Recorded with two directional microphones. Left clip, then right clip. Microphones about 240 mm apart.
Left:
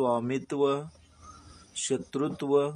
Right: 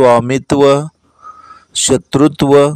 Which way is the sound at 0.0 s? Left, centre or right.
Right.